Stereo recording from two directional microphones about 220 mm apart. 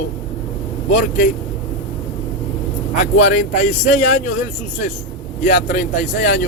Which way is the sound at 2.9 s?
35° left (ahead or behind).